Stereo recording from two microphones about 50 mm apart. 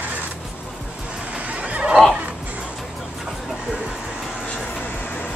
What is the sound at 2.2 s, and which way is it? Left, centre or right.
Music, right.